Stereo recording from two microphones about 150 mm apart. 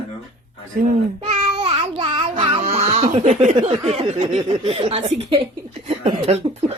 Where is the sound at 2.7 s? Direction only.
45° right (ahead or behind).